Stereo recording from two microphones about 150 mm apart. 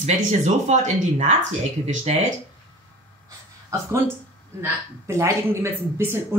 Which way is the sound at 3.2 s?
20° right (ahead or behind).